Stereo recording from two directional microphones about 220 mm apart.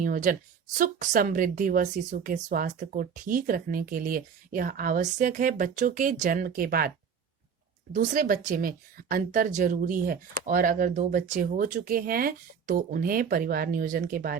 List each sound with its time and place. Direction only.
0.0 s a woman's voice: 40° right (ahead or behind)
7.9 s a woman's voice: 40° right (ahead or behind)